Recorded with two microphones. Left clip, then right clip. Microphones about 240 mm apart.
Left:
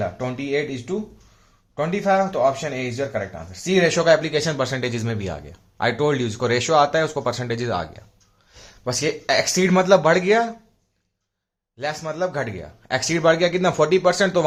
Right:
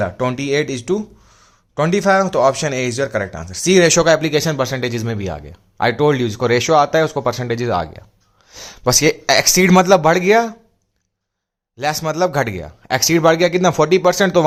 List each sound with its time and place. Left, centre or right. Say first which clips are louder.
0.0 s speech: right 7 dB; right
8.5 s speech: right 10 dB; right
11.8 s speech: right 7 dB; right